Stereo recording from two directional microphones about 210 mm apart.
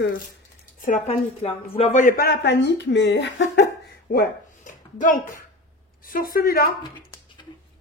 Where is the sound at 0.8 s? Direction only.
35° left (ahead or behind); by 4.2 s 55° left (ahead or behind).